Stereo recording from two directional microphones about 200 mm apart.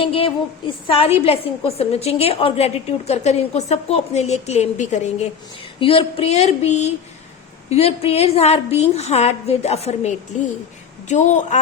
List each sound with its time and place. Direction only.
0.0 s a woman's voice: 30° left (ahead or behind)